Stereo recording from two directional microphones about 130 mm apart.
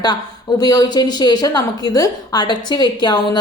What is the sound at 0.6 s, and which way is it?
A woman's voice, 30° left (ahead or behind).